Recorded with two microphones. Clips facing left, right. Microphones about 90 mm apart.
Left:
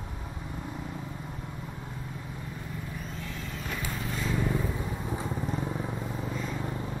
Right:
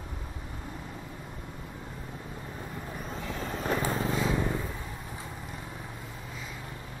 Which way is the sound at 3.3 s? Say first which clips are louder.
Right 9 dB; 40° right (ahead or behind).